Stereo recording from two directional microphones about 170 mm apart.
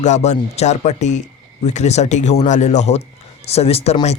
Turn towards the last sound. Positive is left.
turn(degrees=40)  # may be behind; listen again after turning